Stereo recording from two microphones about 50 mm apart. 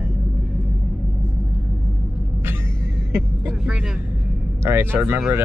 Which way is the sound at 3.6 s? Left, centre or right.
Centre.